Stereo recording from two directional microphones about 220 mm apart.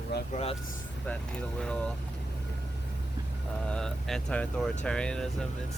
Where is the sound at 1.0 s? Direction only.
5° left (ahead or behind).